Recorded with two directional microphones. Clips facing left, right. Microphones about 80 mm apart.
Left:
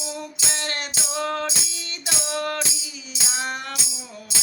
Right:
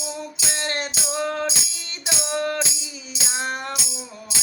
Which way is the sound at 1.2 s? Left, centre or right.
Centre.